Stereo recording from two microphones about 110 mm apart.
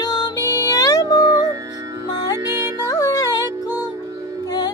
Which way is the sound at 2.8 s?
35° left (ahead or behind).